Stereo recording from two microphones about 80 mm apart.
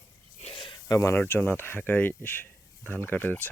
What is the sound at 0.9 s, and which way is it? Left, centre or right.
Speech, left.